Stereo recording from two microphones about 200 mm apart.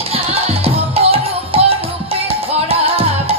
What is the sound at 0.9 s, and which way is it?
Music, 30° right (ahead or behind).